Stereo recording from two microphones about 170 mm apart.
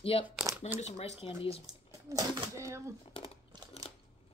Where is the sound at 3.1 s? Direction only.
35° left (ahead or behind).